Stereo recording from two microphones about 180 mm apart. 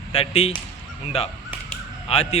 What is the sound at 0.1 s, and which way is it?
A man's voice, 30° left (ahead or behind).